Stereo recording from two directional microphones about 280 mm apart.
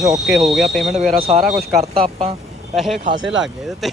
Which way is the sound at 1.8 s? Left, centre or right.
Right.